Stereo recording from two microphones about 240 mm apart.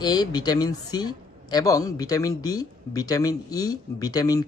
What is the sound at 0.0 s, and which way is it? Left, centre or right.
A man's voice, centre.